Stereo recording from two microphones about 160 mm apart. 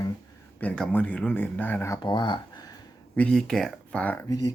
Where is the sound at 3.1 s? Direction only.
5° left (ahead or behind).